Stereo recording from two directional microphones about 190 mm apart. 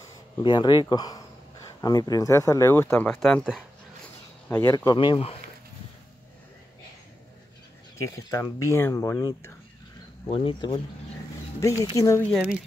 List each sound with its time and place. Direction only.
0.4 s speech: 25° left (ahead or behind); by 3.6 s centre (ahead or behind)
4.5 s speech: 15° left (ahead or behind)
8.3 s speech: 15° left (ahead or behind)
10.2 s speech: 25° left (ahead or behind)
11.6 s speech: 15° left (ahead or behind)